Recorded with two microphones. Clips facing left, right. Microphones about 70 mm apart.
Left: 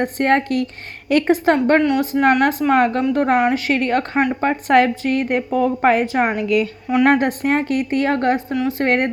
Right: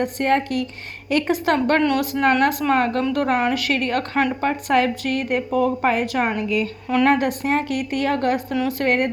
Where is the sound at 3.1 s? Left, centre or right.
Left.